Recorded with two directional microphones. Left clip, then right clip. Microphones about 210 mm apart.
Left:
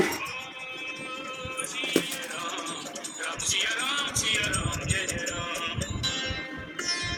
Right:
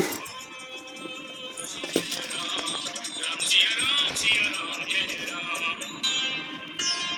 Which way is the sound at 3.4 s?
45° left (ahead or behind).